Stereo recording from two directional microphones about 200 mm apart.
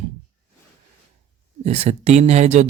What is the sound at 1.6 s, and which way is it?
Speech, 35° right (ahead or behind).